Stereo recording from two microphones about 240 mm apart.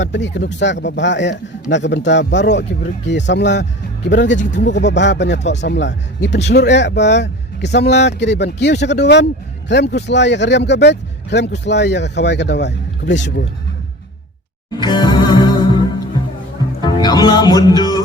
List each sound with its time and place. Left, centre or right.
0.0 s speech: left
14.7 s music: centre
16.8 s music: centre